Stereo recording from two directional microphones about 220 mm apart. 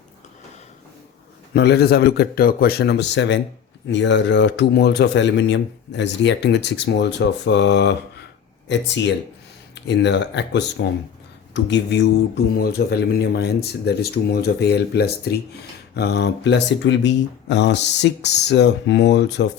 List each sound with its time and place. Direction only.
1.5 s a man's voice: 45° left (ahead or behind)